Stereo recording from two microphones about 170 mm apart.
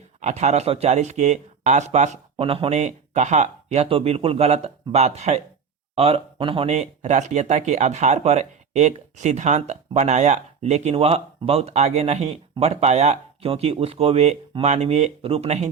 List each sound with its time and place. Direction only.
0.2 s speech: 40° right (ahead or behind)
2.3 s speech: 30° right (ahead or behind)